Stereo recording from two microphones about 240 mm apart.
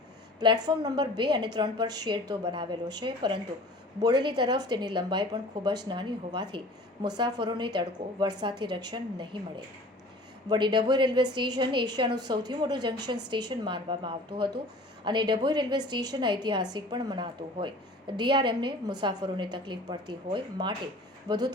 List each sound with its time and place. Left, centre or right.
0.6 s a woman's voice: centre
10.5 s a woman's voice: centre